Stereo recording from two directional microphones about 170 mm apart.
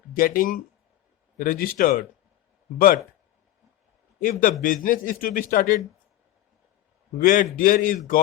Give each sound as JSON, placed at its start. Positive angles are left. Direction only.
{"t": 0.2, "sound": "a man's voice", "side_deg": 55}
{"t": 4.2, "sound": "a man's voice", "side_deg": 55}
{"t": 7.2, "sound": "a man's voice", "side_deg": 55}